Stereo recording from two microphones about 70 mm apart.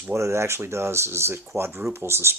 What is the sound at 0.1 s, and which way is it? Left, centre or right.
Speech, right.